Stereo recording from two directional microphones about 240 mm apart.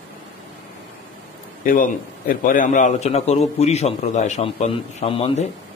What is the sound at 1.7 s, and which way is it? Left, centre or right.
A man's voice, left.